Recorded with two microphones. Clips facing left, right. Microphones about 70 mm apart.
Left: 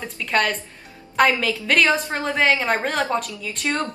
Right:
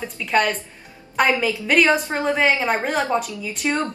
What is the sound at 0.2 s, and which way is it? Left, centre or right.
A woman's voice, centre.